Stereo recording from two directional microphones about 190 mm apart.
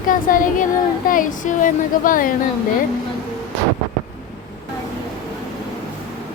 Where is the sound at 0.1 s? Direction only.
45° left (ahead or behind).